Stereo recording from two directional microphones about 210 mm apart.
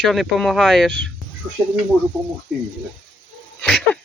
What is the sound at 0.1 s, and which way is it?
Speech, centre (ahead or behind).